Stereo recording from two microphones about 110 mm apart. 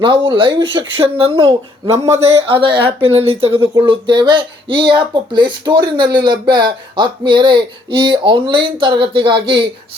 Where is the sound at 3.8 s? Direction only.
45° right (ahead or behind).